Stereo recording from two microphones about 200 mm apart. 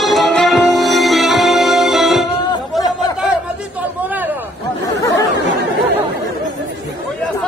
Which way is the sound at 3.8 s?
10° right (ahead or behind).